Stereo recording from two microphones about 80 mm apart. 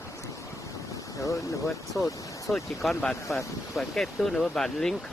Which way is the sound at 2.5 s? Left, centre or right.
Centre.